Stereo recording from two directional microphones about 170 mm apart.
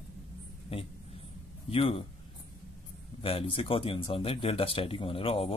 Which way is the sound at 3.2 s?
35° left (ahead or behind).